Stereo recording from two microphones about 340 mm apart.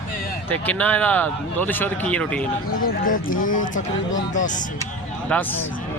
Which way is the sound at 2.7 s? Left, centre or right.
Left.